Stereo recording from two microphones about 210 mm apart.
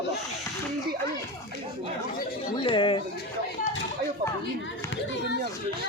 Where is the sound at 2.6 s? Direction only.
25° left (ahead or behind).